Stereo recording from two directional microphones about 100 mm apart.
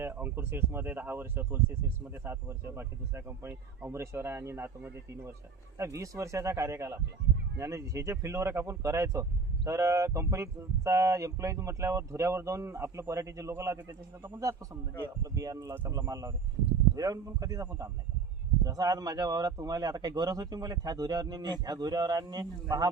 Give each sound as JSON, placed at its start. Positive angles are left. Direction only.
{"t": 0.0, "sound": "speech", "side_deg": -20}